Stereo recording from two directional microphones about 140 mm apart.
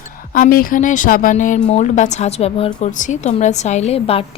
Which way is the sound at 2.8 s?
60° left (ahead or behind).